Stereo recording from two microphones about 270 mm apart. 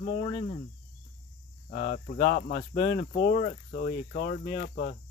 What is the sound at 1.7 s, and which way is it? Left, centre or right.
Speech, left.